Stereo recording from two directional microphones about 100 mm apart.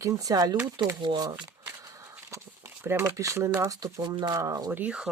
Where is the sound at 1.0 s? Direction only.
45° right (ahead or behind).